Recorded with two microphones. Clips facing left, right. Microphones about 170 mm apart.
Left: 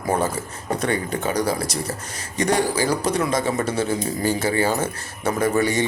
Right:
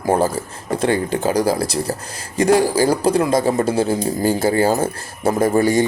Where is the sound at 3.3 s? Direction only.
35° right (ahead or behind).